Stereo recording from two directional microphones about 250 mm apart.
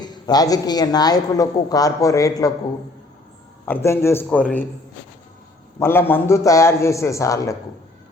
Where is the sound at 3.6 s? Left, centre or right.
Centre.